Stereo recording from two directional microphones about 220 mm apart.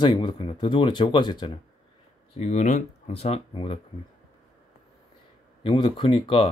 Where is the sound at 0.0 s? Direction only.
20° left (ahead or behind).